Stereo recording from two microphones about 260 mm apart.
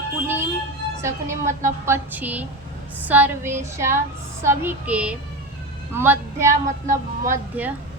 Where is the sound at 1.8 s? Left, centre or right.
Centre.